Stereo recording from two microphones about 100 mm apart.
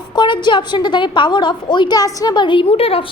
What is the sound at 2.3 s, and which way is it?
Speech, 50° left (ahead or behind).